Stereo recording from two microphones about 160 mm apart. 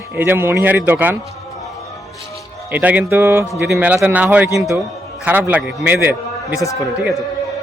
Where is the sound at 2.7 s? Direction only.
10° right (ahead or behind).